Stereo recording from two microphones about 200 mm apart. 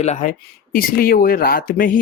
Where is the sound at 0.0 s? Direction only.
35° left (ahead or behind).